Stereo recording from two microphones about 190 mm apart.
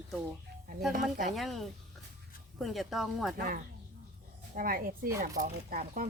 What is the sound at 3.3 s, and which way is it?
Speech, 50° right (ahead or behind).